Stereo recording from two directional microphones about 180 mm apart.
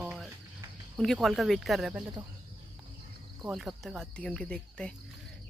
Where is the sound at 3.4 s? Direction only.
Centre (ahead or behind).